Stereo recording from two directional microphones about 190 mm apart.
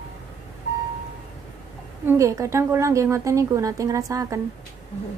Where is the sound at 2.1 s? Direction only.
15° right (ahead or behind).